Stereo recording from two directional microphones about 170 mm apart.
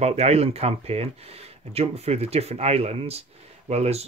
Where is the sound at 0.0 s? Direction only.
40° right (ahead or behind).